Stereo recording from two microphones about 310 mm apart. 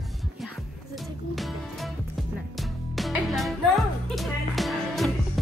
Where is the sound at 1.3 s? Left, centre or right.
Centre.